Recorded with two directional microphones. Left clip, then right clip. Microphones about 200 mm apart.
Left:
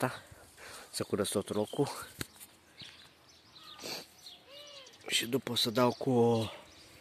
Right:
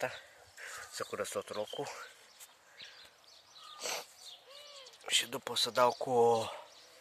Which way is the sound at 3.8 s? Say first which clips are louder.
Right 3 dB; 15° right (ahead or behind).